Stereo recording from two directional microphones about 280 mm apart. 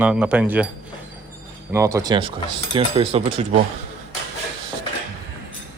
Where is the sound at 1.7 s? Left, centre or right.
Centre.